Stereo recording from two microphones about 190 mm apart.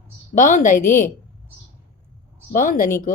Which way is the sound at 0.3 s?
45° left (ahead or behind).